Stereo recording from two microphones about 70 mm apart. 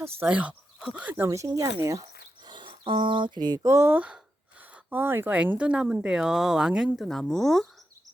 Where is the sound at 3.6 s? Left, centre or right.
Right.